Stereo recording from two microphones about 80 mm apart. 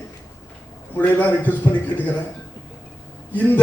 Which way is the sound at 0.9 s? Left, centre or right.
Left.